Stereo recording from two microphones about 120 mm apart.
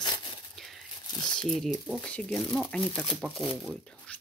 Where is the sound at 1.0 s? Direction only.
35° left (ahead or behind).